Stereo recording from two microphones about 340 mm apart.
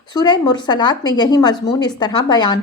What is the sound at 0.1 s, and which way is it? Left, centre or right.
Speech, centre.